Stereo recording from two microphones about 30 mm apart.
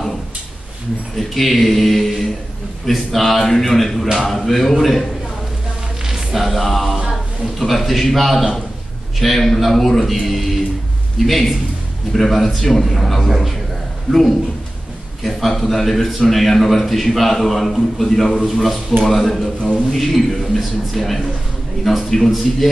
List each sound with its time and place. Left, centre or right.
1.1 s a man's voice: centre
6.0 s music: centre
7.1 s a man's voice: centre
14.1 s a man's voice: right
15.2 s a man's voice: centre